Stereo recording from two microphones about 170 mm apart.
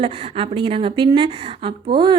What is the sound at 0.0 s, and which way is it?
A woman's voice, 30° right (ahead or behind).